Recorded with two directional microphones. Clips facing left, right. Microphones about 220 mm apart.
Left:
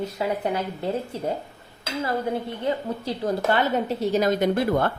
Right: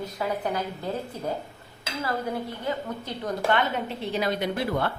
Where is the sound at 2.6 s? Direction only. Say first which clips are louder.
Left 4 dB; 30° left (ahead or behind); by 4.9 s 45° left (ahead or behind).